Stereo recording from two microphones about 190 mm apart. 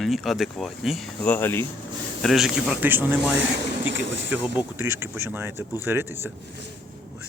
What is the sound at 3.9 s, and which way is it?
Speech, 75° right (ahead or behind).